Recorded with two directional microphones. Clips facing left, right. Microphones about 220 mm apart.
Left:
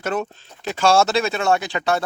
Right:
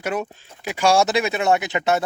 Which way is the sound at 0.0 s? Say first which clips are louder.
Left 1 dB; 10° right (ahead or behind).